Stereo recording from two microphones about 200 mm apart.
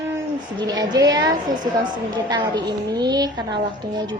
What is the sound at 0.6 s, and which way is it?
A woman's voice, 20° right (ahead or behind).